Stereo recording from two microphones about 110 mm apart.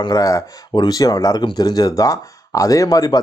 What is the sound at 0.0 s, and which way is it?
Speech, 35° left (ahead or behind).